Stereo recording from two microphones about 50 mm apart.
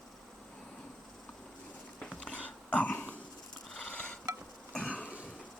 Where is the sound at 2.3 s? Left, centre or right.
Left.